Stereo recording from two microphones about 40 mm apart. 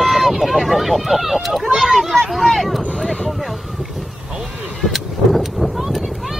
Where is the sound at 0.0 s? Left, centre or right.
Centre.